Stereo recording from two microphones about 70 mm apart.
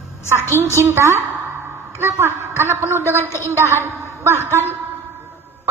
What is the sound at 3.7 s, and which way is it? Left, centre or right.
A woman's voice, right.